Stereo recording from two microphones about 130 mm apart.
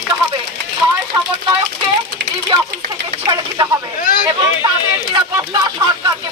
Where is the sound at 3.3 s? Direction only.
30° right (ahead or behind).